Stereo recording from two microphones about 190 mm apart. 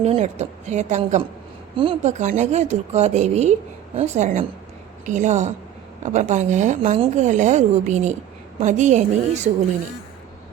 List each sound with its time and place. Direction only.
0.0 s a woman's voice: 35° right (ahead or behind)
1.7 s a woman's voice: 30° right (ahead or behind)